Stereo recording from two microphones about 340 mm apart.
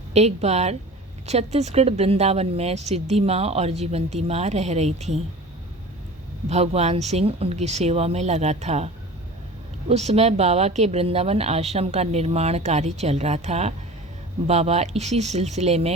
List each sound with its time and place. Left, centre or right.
0.1 s speech: centre
6.5 s speech: centre
9.9 s speech: centre